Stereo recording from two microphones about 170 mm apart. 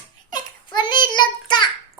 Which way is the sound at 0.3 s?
25° left (ahead or behind).